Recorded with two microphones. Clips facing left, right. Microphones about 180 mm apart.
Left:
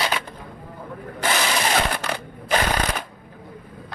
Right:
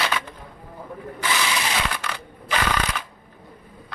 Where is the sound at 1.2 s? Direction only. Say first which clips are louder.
Left 3 dB; 45° left (ahead or behind).